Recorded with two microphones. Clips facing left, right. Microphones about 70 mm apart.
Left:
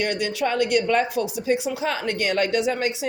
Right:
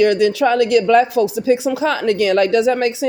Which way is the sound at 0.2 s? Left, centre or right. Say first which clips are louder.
Right 9 dB; right.